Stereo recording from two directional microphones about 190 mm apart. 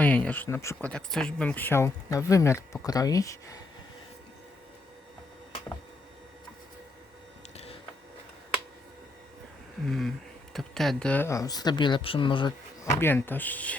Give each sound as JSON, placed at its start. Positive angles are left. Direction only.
{"t": 0.0, "sound": "speech", "side_deg": 5}
{"t": 9.8, "sound": "speech", "side_deg": 0}